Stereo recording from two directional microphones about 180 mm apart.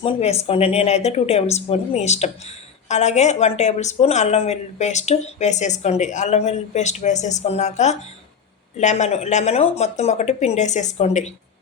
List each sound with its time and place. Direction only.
0.0 s speech: 35° left (ahead or behind)